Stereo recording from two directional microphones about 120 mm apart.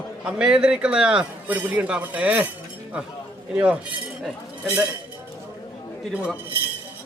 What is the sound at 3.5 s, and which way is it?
Speech, 10° right (ahead or behind).